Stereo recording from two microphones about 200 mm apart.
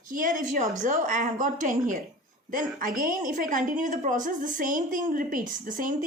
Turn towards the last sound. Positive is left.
turn(degrees=-40)  # may be behind; listen again after turning